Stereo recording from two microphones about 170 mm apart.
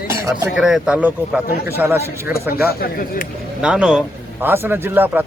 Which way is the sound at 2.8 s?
55° left (ahead or behind).